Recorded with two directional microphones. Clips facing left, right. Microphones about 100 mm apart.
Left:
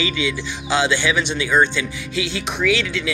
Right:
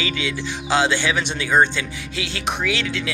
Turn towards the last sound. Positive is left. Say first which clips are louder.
# left 4 dB
turn(degrees=-35)  # may be behind; listen again after turning